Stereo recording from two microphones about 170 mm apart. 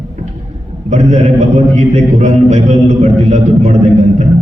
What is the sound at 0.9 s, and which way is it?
A man's voice, 40° right (ahead or behind).